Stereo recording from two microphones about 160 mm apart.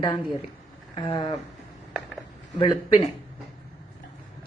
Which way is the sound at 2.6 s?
30° left (ahead or behind).